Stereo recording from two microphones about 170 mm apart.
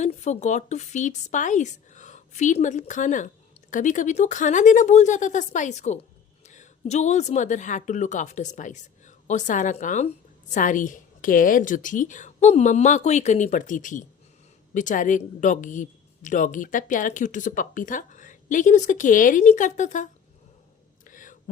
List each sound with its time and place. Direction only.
0.0 s a woman's voice: 45° left (ahead or behind)
21.0 s whispering: 50° left (ahead or behind)